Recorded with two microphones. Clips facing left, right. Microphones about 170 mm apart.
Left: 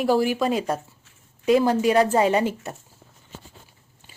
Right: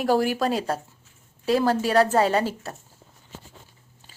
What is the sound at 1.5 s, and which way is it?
Speech, 15° left (ahead or behind).